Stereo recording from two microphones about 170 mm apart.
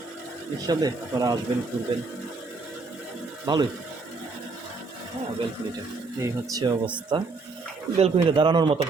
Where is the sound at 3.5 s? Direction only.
25° right (ahead or behind).